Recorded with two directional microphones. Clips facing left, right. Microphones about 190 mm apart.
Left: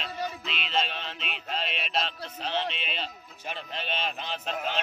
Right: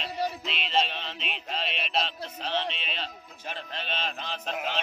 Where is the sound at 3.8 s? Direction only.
5° left (ahead or behind).